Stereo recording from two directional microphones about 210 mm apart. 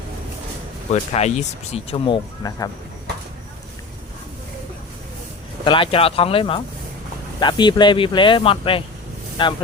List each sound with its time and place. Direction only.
1.1 s speech: 30° left (ahead or behind)
5.6 s speech: 25° left (ahead or behind)